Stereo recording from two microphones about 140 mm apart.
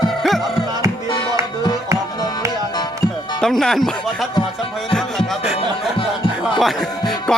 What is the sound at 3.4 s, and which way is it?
Speech, 5° left (ahead or behind).